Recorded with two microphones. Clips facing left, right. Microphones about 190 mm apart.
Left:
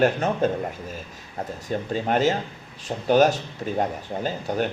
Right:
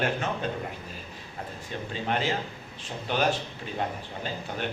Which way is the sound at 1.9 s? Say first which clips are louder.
Left 7 dB; 45° left (ahead or behind).